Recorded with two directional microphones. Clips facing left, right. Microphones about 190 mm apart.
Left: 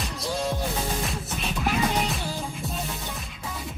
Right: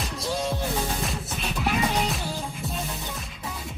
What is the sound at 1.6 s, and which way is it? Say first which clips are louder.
Music: even; centre (ahead or behind).